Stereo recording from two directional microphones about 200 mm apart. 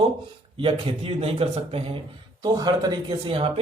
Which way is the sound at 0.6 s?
25° right (ahead or behind).